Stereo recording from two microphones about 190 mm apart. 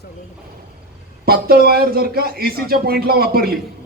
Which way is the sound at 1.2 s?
55° right (ahead or behind).